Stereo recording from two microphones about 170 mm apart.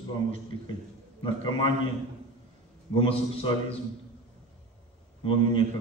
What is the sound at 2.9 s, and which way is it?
Speech, 30° left (ahead or behind).